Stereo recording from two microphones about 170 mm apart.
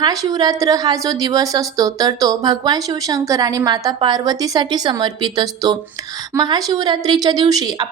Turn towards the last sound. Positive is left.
turn(degrees=-20)  # may be behind; listen again after turning